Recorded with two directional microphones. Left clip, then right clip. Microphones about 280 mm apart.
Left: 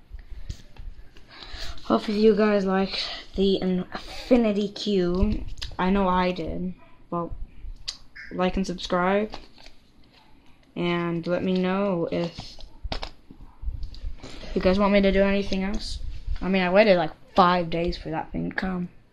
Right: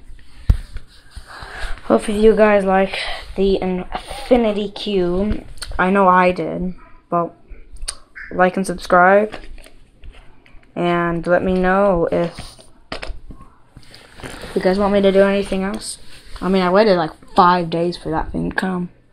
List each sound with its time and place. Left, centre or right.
1.9 s speech: centre
6.3 s speech: centre
8.4 s speech: centre
10.7 s speech: centre
14.6 s speech: centre
15.1 s speech: centre